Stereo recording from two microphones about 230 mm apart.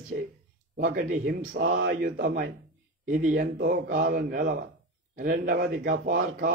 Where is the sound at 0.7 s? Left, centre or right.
Right.